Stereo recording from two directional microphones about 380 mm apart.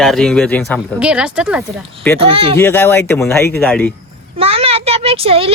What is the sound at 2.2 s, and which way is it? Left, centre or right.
Speech, centre.